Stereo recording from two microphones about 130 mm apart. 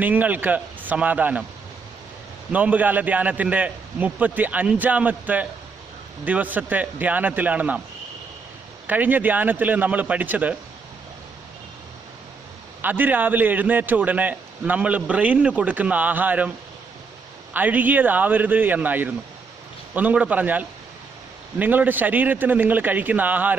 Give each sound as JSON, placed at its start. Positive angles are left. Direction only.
{"t": 0.0, "sound": "a man's voice", "side_deg": -15}
{"t": 2.5, "sound": "a man's voice", "side_deg": -10}
{"t": 8.8, "sound": "a man's voice", "side_deg": -15}
{"t": 12.8, "sound": "a man's voice", "side_deg": -15}
{"t": 17.6, "sound": "a man's voice", "side_deg": -15}